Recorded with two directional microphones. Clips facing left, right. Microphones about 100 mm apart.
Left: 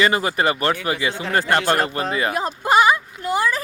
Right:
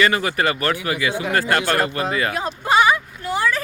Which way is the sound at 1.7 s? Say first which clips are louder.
Even; 25° left (ahead or behind).